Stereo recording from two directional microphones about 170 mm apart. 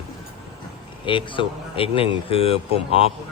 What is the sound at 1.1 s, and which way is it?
Speech, 30° left (ahead or behind).